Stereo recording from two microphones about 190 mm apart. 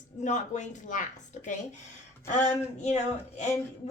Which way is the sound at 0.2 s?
40° left (ahead or behind).